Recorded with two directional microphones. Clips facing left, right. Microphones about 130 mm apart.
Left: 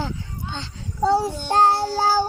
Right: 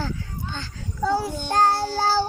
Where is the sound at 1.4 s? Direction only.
25° left (ahead or behind).